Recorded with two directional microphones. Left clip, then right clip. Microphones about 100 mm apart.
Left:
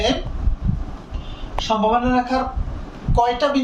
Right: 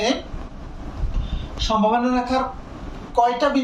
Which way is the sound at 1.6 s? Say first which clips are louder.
Left 1 dB; 20° left (ahead or behind).